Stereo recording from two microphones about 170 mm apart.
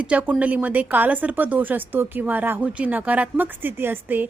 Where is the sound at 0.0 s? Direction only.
10° right (ahead or behind).